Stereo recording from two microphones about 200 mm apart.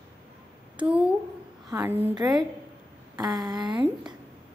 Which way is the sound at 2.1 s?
20° right (ahead or behind).